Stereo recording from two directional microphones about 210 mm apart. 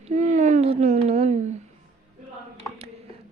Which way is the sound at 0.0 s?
35° right (ahead or behind).